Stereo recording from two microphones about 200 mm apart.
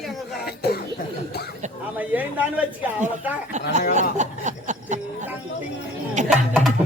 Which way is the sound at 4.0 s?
35° right (ahead or behind).